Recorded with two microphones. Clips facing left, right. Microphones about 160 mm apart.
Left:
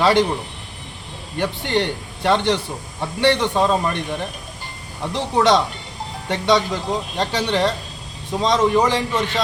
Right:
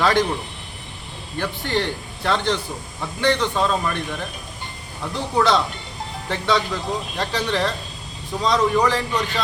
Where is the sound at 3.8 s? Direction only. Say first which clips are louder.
Left 2 dB; 30° left (ahead or behind).